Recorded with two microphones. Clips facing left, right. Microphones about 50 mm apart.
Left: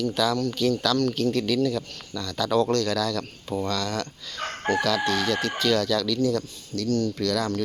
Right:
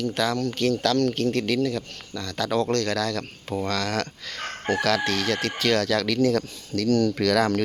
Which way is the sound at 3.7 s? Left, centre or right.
Right.